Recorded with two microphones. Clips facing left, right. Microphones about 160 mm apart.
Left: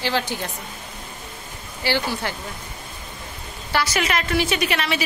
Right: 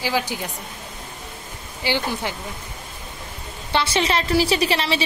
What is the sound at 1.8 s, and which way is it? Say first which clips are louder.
Speech: even; 15° right (ahead or behind).